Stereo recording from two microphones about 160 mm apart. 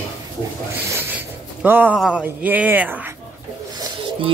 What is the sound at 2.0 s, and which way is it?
A woman's voice, 5° right (ahead or behind).